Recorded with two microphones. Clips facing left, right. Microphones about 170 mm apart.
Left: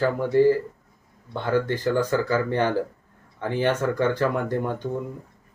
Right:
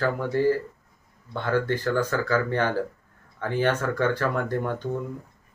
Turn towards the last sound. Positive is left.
turn(degrees=15)  # may be behind; listen again after turning